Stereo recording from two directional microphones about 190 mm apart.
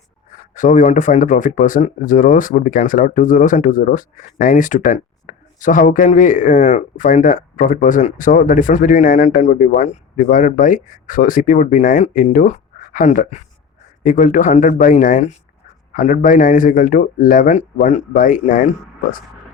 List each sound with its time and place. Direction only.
0.5 s speech: 40° left (ahead or behind)